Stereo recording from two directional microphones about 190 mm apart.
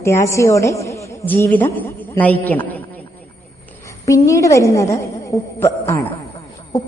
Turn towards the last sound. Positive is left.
turn(degrees=20)  # may be behind; listen again after turning